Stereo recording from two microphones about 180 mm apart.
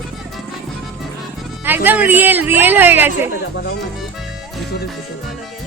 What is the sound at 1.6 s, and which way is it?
Speech, 10° right (ahead or behind).